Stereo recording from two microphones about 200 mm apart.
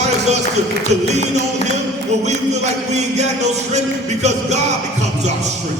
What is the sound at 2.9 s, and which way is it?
A man's voice, 35° right (ahead or behind).